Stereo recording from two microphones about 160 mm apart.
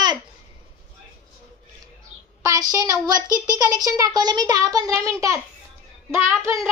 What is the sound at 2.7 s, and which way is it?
Speech, 20° right (ahead or behind).